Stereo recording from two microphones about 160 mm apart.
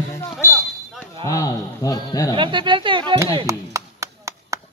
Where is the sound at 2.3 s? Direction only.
30° right (ahead or behind).